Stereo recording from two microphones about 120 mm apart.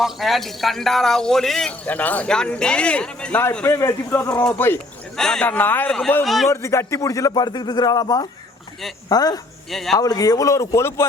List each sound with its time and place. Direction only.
0.0 s a man's voice: centre (ahead or behind)
3.7 s speech: 25° left (ahead or behind)
4.3 s speech: 15° left (ahead or behind)
5.1 s speech: 5° left (ahead or behind)
6.2 s a man's voice: centre (ahead or behind)
6.5 s speech: 25° left (ahead or behind)
9.6 s a man's voice: centre (ahead or behind)
10.0 s speech: 30° left (ahead or behind)